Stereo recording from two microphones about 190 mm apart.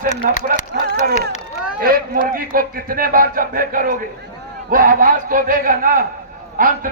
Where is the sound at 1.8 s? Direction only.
50° right (ahead or behind).